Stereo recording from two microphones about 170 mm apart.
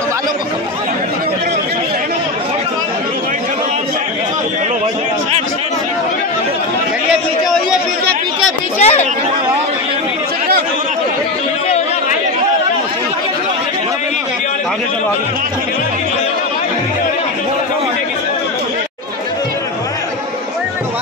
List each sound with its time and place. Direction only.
8.7 s chatter: 40° left (ahead or behind)